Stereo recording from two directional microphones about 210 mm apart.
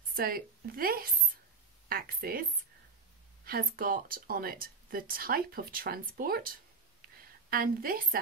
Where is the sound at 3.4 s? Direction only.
45° right (ahead or behind).